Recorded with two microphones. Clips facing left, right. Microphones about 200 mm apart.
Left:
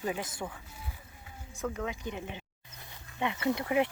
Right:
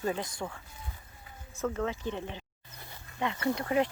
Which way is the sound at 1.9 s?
30° right (ahead or behind).